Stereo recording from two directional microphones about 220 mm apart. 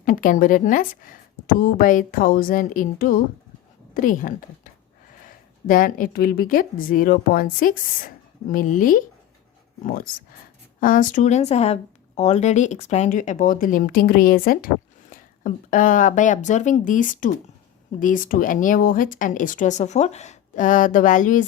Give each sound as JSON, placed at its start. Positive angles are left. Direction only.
{"t": 0.0, "sound": "speech", "side_deg": 35}